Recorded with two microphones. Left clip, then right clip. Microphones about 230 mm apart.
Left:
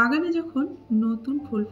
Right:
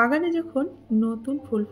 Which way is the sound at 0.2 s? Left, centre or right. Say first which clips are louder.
Right 1 dB; right.